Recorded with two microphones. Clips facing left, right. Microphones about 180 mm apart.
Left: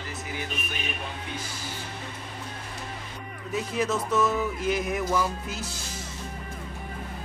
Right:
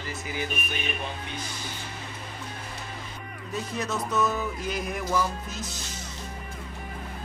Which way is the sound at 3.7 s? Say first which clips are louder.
Left 3 dB; 5° left (ahead or behind).